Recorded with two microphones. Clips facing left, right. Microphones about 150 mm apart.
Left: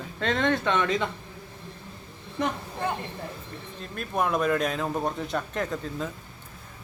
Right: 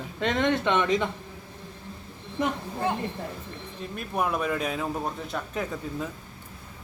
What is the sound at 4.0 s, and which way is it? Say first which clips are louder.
Speech: left 2 dB; 10° right (ahead or behind).